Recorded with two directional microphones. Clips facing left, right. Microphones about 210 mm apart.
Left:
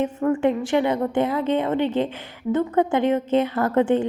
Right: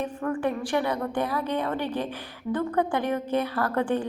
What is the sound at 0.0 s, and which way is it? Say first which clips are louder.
A woman's voice: left 7 dB; 25° left (ahead or behind).